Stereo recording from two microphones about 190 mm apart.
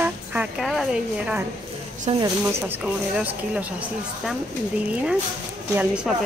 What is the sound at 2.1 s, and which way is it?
Speech, 35° right (ahead or behind).